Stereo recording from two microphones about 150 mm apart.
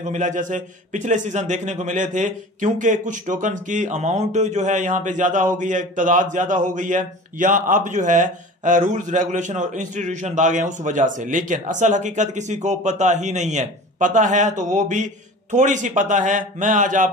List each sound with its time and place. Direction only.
0.0 s a man's voice: 55° right (ahead or behind)